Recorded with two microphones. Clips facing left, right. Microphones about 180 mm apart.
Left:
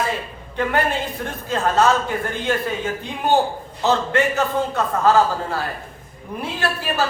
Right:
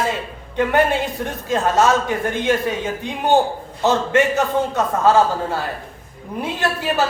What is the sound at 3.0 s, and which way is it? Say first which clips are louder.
A man's voice: right 2 dB; 20° right (ahead or behind).